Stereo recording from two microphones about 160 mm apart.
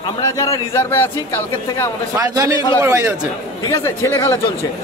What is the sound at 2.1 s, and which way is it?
Speech, 20° right (ahead or behind).